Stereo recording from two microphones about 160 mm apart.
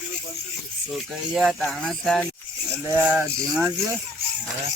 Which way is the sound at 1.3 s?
Centre (ahead or behind).